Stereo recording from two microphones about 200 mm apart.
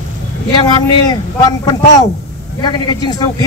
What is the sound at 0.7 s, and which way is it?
A man's voice, 20° left (ahead or behind).